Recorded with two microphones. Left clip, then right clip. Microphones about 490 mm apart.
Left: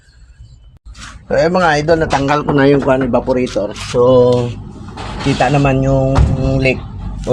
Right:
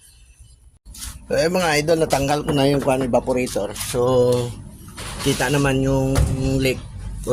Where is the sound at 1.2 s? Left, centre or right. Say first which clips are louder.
Left 7 dB; right.